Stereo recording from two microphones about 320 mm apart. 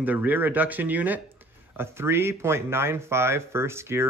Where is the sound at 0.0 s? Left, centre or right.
Centre.